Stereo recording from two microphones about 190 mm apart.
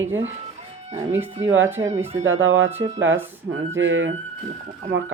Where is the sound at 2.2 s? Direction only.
90° right.